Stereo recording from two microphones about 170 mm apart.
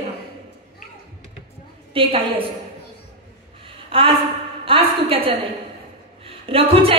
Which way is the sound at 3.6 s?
30° right (ahead or behind).